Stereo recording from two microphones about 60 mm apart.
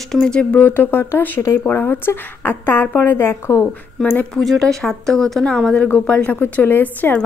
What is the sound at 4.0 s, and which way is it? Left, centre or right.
Speech, left.